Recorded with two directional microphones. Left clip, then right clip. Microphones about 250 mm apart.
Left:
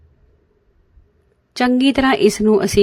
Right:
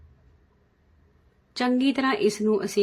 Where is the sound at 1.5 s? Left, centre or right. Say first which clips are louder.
Left 8 dB; left.